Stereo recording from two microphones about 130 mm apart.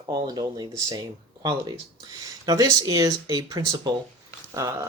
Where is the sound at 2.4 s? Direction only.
30° right (ahead or behind).